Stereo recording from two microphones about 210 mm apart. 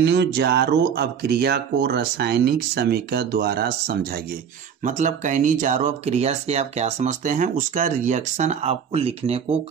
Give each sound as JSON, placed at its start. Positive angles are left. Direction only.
{"t": 0.0, "sound": "speech", "side_deg": -55}
{"t": 4.8, "sound": "speech", "side_deg": -35}